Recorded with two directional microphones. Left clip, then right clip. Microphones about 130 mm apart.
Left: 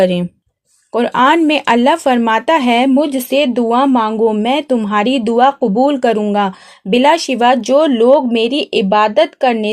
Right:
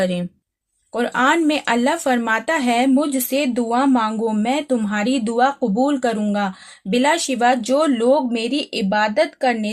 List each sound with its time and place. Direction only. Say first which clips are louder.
0.0 s speech: left 8 dB; 50° left (ahead or behind)